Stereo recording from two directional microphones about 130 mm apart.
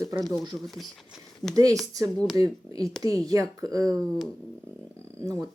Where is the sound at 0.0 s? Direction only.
25° right (ahead or behind).